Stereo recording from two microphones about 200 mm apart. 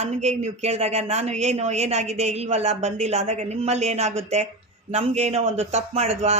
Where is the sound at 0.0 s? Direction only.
35° right (ahead or behind).